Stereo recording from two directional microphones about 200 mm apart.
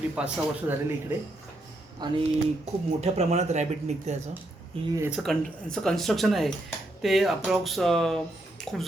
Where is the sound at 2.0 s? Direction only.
20° right (ahead or behind).